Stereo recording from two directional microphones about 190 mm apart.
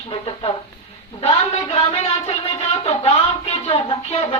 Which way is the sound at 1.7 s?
30° left (ahead or behind).